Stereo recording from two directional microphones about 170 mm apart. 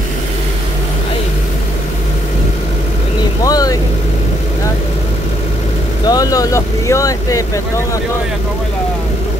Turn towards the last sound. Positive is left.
turn(degrees=20)  # may be behind; listen again after turning